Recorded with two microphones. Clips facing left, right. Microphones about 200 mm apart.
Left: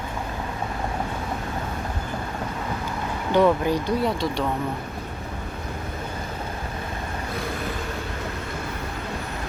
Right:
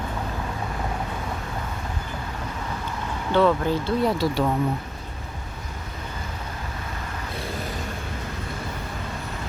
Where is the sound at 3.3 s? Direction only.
15° left (ahead or behind).